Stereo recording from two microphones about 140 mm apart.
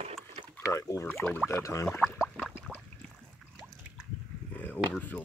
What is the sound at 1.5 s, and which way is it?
Speech, 20° left (ahead or behind).